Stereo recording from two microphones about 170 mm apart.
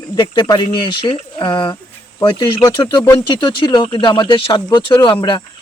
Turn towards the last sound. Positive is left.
turn(degrees=30)  # may be behind; listen again after turning